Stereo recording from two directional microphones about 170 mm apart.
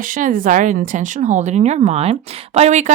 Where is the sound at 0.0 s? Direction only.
50° right (ahead or behind).